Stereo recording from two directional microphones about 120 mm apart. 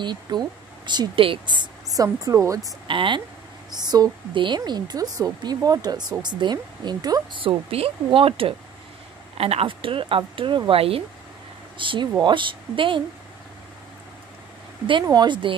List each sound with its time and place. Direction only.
0.0 s speech: 35° right (ahead or behind)
2.9 s speech: 45° right (ahead or behind)
7.4 s speech: 50° right (ahead or behind)
15.1 s speech: 40° right (ahead or behind)